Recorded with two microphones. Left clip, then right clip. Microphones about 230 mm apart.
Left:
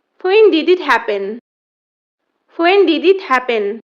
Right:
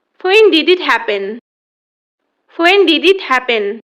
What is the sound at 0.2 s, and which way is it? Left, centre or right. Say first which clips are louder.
A woman's voice: right 2 dB; centre.